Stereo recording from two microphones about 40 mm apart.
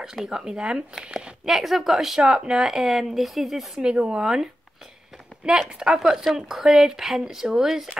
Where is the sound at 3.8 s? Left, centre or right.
Right.